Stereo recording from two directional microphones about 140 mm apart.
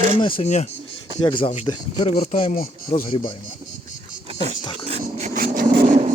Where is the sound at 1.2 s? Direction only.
35° left (ahead or behind).